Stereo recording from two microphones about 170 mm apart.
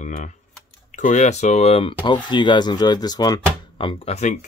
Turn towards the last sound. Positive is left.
turn(degrees=40)  # may be behind; listen again after turning